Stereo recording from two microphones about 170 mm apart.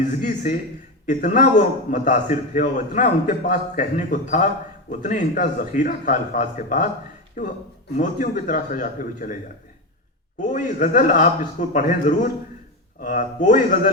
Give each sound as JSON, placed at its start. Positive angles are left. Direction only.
{"t": 0.0, "sound": "a man's voice", "side_deg": 50}
{"t": 10.4, "sound": "a man's voice", "side_deg": 45}